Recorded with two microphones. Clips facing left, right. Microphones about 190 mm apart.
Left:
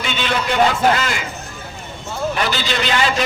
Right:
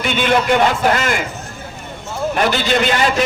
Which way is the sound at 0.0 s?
50° right (ahead or behind).